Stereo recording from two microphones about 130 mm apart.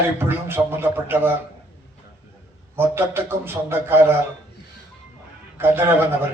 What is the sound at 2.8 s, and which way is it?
A man's voice, 15° right (ahead or behind).